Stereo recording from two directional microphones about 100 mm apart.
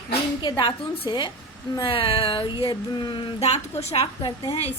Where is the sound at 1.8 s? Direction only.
65° left (ahead or behind).